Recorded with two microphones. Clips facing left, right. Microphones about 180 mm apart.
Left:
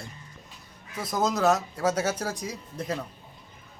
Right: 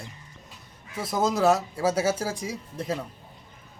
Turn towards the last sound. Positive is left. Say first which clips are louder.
# right 1 dB
turn(degrees=-5)  # may be behind; listen again after turning